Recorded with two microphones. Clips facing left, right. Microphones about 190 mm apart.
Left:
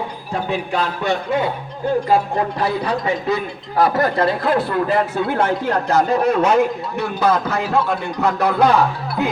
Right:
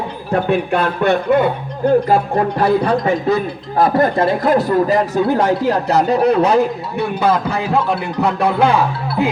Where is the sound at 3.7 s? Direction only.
25° right (ahead or behind).